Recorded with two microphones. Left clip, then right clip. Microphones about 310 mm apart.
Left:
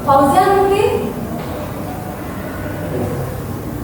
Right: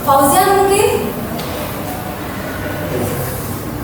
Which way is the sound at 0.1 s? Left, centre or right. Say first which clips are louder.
Even; left.